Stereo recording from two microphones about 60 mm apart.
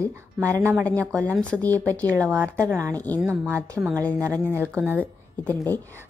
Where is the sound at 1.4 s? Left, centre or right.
Left.